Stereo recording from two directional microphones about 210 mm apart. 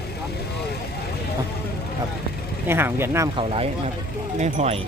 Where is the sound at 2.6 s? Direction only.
10° right (ahead or behind).